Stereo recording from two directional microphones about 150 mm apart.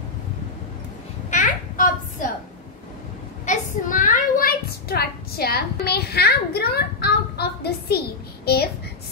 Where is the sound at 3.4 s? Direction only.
55° left (ahead or behind).